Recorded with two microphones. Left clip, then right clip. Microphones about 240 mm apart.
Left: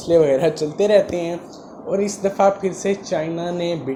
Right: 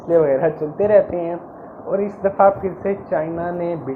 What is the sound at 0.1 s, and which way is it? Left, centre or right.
Speech, left.